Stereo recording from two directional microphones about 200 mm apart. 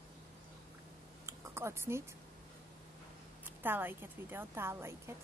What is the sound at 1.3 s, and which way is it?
Speech, 15° right (ahead or behind).